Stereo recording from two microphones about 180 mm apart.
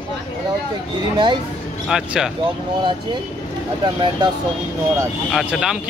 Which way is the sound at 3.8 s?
25° right (ahead or behind).